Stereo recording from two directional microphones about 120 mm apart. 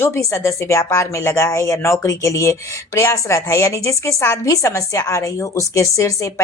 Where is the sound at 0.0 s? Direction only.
25° left (ahead or behind).